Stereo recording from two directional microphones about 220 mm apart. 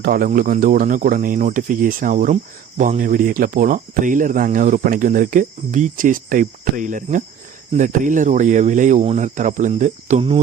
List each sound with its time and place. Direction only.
0.0 s speech: 40° right (ahead or behind)